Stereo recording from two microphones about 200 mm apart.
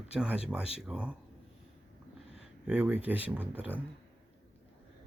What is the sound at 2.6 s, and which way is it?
Speech, 5° right (ahead or behind).